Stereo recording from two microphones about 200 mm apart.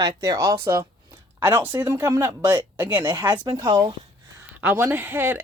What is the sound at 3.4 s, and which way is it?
Speech, 20° right (ahead or behind).